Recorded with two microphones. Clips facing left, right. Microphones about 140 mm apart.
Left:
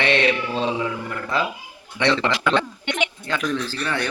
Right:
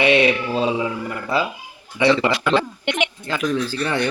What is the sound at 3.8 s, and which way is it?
Speech, 20° right (ahead or behind).